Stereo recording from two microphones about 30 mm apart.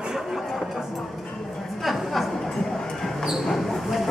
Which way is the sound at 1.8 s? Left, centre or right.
Centre.